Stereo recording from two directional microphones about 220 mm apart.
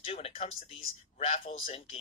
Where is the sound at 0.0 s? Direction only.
25° left (ahead or behind).